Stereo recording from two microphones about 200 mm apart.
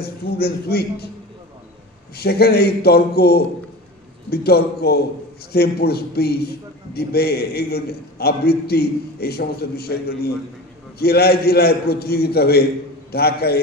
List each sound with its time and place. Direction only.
0.0 s a man's voice: 50° left (ahead or behind)
2.1 s a man's voice: 55° left (ahead or behind)